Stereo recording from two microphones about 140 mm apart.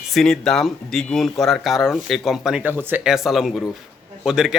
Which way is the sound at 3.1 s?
Centre (ahead or behind).